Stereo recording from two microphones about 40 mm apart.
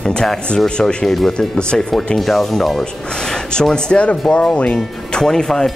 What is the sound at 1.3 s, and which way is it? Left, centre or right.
Speech, left.